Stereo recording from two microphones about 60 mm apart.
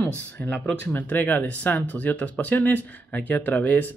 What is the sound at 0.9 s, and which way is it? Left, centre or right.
Speech, left.